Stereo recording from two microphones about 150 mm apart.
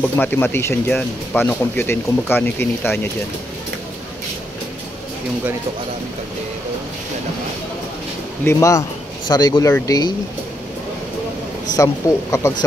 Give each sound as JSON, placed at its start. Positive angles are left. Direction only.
{"t": 0.0, "sound": "speech", "side_deg": 10}
{"t": 8.5, "sound": "speech", "side_deg": 20}
{"t": 11.7, "sound": "speech", "side_deg": 20}